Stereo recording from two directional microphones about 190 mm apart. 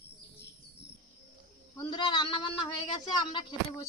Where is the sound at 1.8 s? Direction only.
25° left (ahead or behind).